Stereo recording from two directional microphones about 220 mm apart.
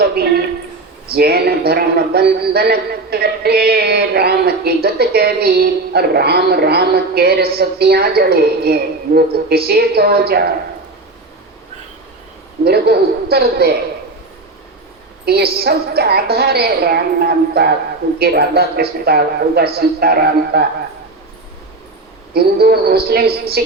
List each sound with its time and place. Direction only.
0.0 s a sound: 45° right (ahead or behind)
1.1 s a man's voice: 45° right (ahead or behind)
12.6 s a man's voice: 45° right (ahead or behind)
15.2 s a man's voice: 45° right (ahead or behind)
22.3 s a man's voice: 45° right (ahead or behind)